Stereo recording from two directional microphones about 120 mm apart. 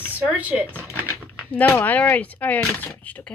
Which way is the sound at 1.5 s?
15° left (ahead or behind).